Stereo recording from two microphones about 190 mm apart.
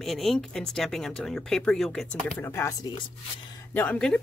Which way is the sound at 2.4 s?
10° left (ahead or behind).